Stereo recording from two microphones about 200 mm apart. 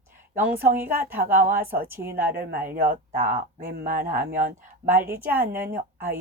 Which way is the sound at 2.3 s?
50° right (ahead or behind).